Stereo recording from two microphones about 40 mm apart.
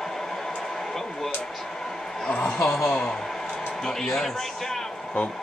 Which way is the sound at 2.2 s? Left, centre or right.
Left.